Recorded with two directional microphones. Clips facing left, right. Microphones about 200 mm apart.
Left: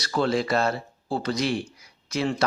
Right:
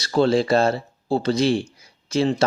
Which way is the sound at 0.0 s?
30° right (ahead or behind).